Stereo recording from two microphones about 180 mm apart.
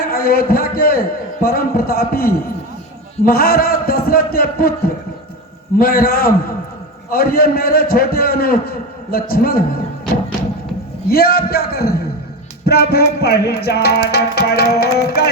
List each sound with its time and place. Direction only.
0.0 s music: 55° left (ahead or behind)
5.8 s music: 55° left (ahead or behind)
11.1 s music: 55° left (ahead or behind)